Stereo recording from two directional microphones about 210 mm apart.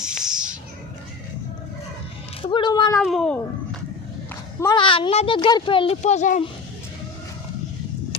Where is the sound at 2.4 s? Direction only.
20° left (ahead or behind).